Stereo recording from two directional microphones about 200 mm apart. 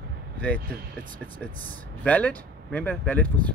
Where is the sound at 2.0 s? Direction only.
5° left (ahead or behind).